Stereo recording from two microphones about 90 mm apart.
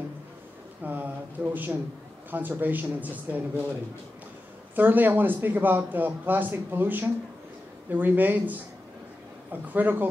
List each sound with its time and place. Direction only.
0.8 s a sound: 20° right (ahead or behind)
2.3 s a man's voice: 20° right (ahead or behind)
4.7 s a man's voice: 20° right (ahead or behind)